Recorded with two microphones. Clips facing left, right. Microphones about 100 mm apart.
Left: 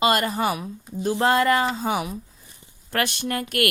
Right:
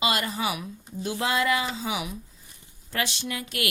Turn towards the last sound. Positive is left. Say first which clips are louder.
# left 7 dB
turn(degrees=50)  # may be behind; listen again after turning